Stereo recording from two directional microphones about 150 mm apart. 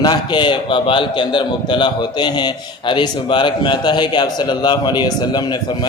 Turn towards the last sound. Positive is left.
turn(degrees=30)  # may be behind; listen again after turning